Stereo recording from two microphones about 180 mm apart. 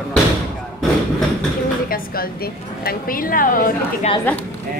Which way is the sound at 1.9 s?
55° left (ahead or behind).